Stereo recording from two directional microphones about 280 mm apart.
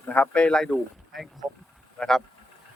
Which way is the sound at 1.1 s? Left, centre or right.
Centre.